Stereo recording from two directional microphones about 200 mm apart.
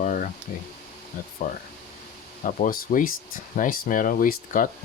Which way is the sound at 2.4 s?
40° left (ahead or behind).